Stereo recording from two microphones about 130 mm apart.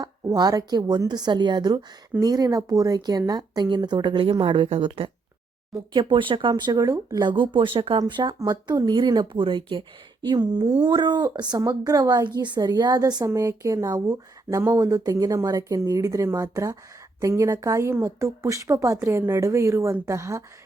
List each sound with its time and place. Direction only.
0.0 s a woman's voice: 30° right (ahead or behind)